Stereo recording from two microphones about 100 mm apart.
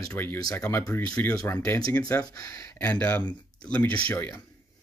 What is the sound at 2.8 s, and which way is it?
Speech, 15° left (ahead or behind).